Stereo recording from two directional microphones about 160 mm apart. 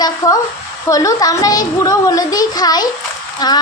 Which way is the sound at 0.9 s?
20° left (ahead or behind).